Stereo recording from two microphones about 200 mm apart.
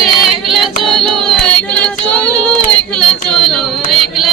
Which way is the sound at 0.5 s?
Centre (ahead or behind).